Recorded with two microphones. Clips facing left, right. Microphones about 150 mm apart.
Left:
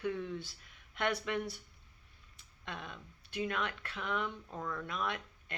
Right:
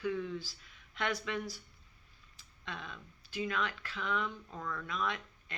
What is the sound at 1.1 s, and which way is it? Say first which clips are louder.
Speech: left 1 dB; 60° left (ahead or behind).